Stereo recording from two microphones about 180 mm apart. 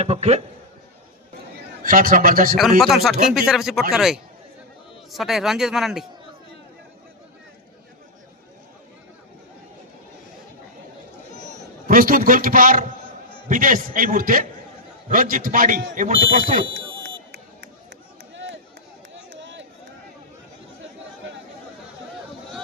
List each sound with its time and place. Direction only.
0.0 s a man's voice: 35° right (ahead or behind)
1.8 s a man's voice: 50° right (ahead or behind)
2.6 s speech: centre (ahead or behind)
11.9 s a man's voice: 50° right (ahead or behind)
19.1 s a sound: 90° right